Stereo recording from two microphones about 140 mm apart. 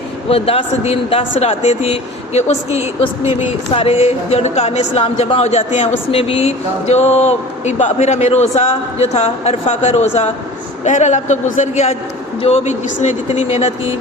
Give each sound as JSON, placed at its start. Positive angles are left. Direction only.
{"t": 0.3, "sound": "a man's voice", "side_deg": 45}